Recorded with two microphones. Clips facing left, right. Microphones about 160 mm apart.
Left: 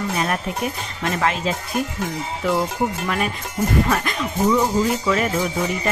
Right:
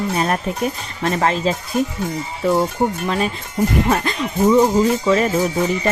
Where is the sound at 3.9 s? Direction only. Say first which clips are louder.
Right 3 dB; 30° right (ahead or behind).